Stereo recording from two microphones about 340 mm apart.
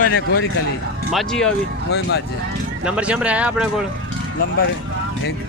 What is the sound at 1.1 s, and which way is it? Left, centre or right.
Speech, centre.